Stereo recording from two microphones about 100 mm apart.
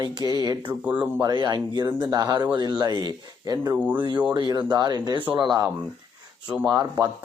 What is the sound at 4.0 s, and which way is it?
Speech, 55° right (ahead or behind).